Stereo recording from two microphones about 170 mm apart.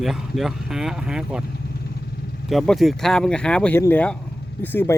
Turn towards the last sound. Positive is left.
turn(degrees=10)  # may be behind; listen again after turning